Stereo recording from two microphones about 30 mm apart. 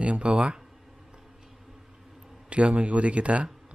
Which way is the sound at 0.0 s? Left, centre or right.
Right.